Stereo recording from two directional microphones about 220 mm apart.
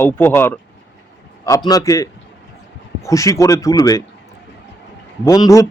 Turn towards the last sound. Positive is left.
turn(degrees=15)  # may be behind; listen again after turning